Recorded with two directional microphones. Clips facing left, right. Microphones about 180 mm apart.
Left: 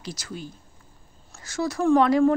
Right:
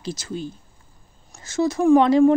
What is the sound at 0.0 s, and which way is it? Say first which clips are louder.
A woman's voice: right 6 dB; 25° right (ahead or behind).